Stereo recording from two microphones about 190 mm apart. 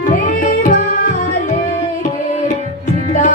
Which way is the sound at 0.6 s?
45° left (ahead or behind).